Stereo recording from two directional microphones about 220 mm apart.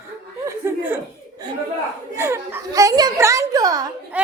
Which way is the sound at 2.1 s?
10° right (ahead or behind).